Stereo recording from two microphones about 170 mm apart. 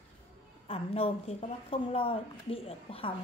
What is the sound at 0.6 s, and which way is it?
A woman's voice, 35° left (ahead or behind).